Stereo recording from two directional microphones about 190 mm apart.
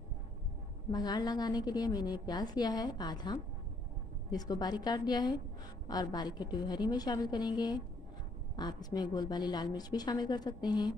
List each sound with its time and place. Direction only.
0.9 s a woman's voice: 20° left (ahead or behind)